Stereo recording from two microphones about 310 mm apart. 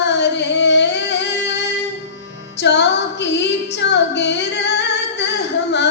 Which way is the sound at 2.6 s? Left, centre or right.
Left.